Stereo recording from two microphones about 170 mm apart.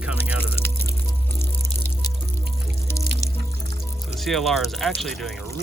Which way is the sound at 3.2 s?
20° left (ahead or behind).